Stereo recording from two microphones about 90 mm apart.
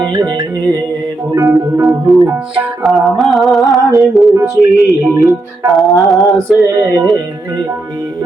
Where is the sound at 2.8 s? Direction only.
Centre (ahead or behind).